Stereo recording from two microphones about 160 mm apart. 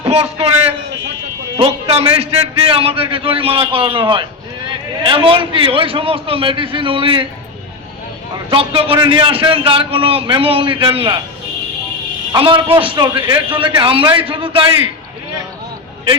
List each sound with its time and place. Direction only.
0.0 s a man's voice: 35° right (ahead or behind)
8.4 s a man's voice: 35° right (ahead or behind)
12.4 s a man's voice: 30° right (ahead or behind)